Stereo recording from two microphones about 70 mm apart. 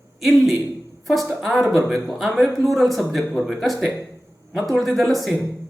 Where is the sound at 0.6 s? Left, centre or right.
Centre.